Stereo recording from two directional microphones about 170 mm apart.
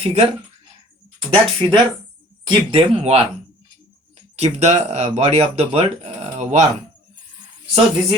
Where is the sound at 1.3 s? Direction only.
30° right (ahead or behind).